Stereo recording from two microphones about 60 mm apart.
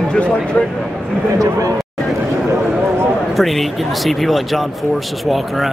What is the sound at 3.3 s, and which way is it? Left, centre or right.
Speech, centre.